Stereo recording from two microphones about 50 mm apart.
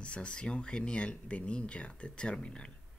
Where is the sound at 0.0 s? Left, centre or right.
Left.